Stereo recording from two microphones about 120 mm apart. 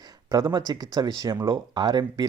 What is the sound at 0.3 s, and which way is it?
Speech, 30° right (ahead or behind).